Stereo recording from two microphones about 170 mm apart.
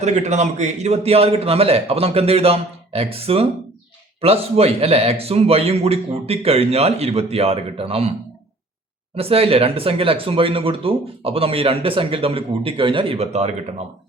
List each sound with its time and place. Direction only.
0.0 s speech: 40° right (ahead or behind)
9.1 s speech: 35° right (ahead or behind)